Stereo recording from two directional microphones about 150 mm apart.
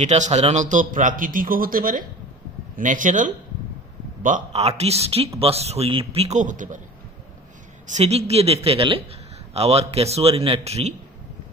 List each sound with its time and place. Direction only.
0.0 s a man's voice: 50° right (ahead or behind)
7.8 s a man's voice: 50° right (ahead or behind)